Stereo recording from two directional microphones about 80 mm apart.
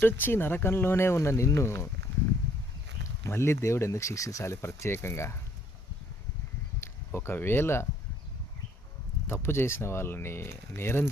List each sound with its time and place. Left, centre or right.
0.0 s speech: left
3.2 s speech: left
6.7 s speech: left
9.2 s speech: left